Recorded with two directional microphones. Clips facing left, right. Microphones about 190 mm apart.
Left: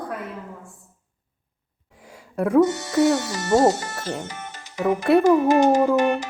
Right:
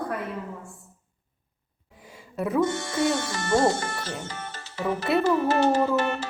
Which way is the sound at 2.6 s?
40° left (ahead or behind).